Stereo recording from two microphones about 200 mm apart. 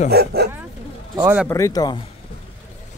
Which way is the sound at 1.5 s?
15° left (ahead or behind).